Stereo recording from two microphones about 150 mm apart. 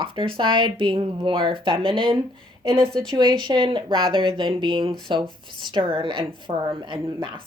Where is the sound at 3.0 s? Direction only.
30° right (ahead or behind).